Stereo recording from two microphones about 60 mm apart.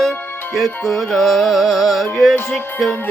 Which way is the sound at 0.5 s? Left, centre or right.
Centre.